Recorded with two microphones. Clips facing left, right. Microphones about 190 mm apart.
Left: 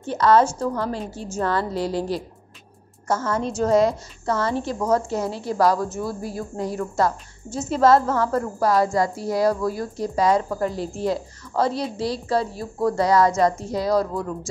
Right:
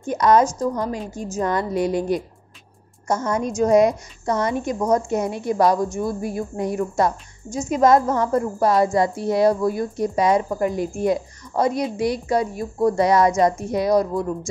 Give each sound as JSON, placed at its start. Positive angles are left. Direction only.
{"t": 0.1, "sound": "a woman's voice", "side_deg": -15}